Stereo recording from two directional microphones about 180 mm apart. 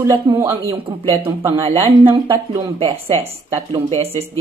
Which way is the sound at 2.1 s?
30° right (ahead or behind).